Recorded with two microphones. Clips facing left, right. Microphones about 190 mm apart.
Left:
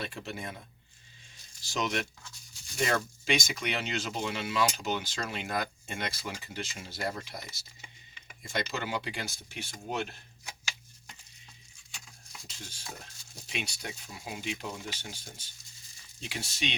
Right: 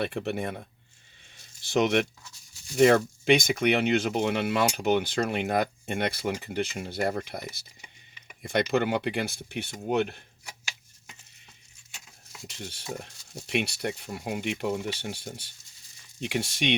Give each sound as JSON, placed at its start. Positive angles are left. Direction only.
{"t": 0.0, "sound": "speech", "side_deg": -60}
{"t": 1.6, "sound": "speech", "side_deg": -60}
{"t": 12.5, "sound": "speech", "side_deg": -65}